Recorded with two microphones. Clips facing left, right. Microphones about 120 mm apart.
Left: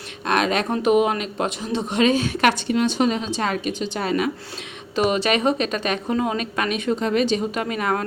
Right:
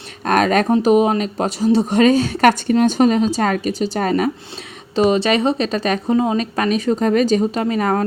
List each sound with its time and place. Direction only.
0.3 s speech: 45° right (ahead or behind)